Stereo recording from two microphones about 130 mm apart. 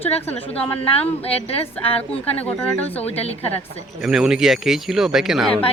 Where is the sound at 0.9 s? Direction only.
50° left (ahead or behind).